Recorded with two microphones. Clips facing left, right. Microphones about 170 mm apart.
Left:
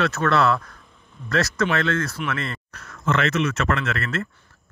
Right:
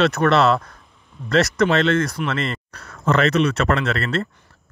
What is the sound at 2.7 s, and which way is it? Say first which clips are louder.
Speech: right 3 dB; 35° right (ahead or behind).